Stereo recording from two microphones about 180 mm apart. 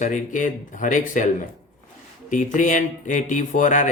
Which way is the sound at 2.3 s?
45° left (ahead or behind).